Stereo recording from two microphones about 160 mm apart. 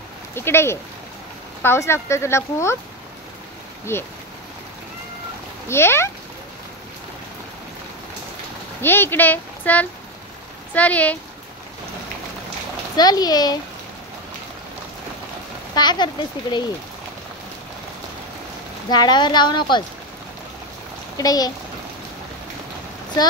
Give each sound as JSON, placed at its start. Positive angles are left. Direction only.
{"t": 0.3, "sound": "speech", "side_deg": 15}
{"t": 3.9, "sound": "speech", "side_deg": 15}
{"t": 5.7, "sound": "speech", "side_deg": 15}
{"t": 8.8, "sound": "speech", "side_deg": 15}
{"t": 12.9, "sound": "a woman's voice", "side_deg": 25}
{"t": 15.7, "sound": "speech", "side_deg": 25}
{"t": 18.9, "sound": "a woman's voice", "side_deg": 25}
{"t": 21.2, "sound": "a woman's voice", "side_deg": 25}